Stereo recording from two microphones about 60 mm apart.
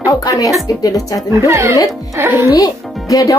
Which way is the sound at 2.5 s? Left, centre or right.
Left.